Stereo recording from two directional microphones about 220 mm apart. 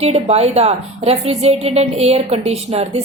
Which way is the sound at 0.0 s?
30° right (ahead or behind).